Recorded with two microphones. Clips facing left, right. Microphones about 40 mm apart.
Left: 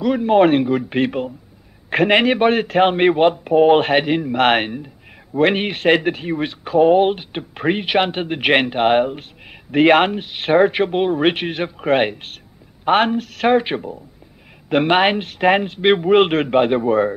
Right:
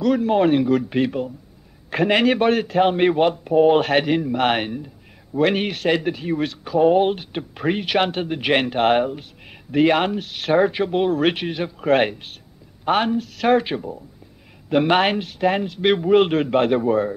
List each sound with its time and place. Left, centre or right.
0.0 s speech: centre
0.4 s speech: left
3.9 s speech: centre
9.7 s speech: left; by 15.2 s centre
15.5 s speech: left
15.8 s speech: left
16.5 s speech: centre